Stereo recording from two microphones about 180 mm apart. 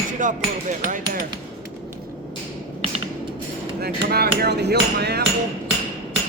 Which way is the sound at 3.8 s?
60° right (ahead or behind).